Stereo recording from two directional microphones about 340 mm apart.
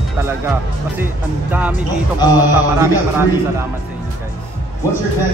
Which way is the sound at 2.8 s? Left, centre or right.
Centre.